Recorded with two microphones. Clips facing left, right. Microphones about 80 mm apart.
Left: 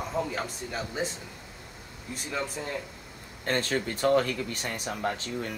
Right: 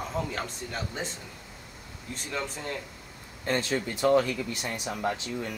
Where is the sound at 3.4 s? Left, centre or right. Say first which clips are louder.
Even; left.